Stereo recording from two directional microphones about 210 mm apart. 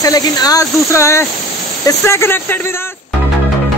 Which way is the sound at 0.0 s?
15° left (ahead or behind).